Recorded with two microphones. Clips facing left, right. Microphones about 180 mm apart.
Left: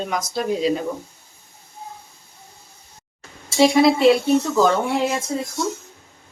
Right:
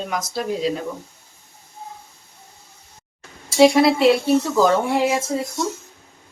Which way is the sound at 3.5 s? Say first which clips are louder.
Right 1 dB; centre (ahead or behind).